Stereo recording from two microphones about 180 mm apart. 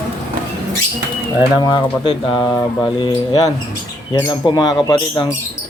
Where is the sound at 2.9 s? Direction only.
25° left (ahead or behind).